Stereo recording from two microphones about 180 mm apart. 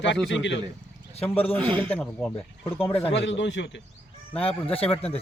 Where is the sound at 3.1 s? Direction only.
90° left.